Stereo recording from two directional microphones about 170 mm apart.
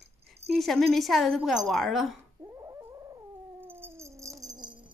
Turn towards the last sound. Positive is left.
turn(degrees=-25)  # may be behind; listen again after turning